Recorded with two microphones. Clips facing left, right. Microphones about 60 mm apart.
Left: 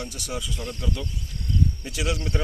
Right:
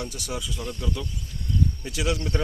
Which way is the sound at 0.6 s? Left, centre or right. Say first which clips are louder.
Even; centre.